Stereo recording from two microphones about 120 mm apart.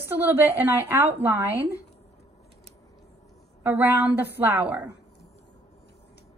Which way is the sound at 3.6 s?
15° right (ahead or behind).